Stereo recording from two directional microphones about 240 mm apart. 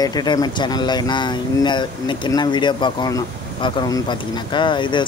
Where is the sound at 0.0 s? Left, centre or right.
Centre.